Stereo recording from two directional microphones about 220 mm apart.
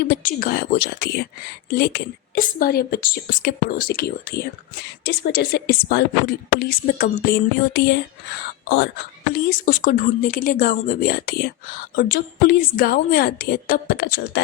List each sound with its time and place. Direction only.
0.1 s a woman's voice: 40° left (ahead or behind)
9.3 s speech: 40° left (ahead or behind)